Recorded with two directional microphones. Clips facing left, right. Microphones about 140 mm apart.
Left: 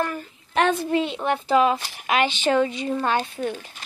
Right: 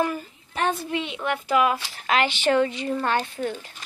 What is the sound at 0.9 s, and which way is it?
Speech, 35° left (ahead or behind).